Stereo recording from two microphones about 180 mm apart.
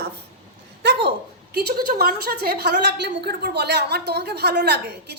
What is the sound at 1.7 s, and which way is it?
A woman's voice, 60° right (ahead or behind).